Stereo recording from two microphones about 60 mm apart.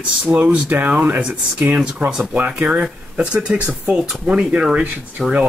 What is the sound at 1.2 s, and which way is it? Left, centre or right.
Speech, centre.